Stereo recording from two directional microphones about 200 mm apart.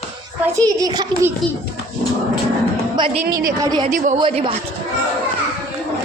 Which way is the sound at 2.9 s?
25° right (ahead or behind).